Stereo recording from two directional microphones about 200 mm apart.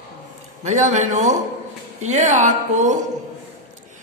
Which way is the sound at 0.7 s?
35° right (ahead or behind).